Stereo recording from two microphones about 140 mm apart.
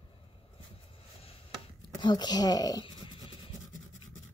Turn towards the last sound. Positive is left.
turn(degrees=30)  # may be behind; listen again after turning